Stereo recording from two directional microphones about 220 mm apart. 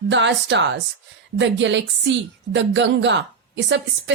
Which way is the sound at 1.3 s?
55° right (ahead or behind).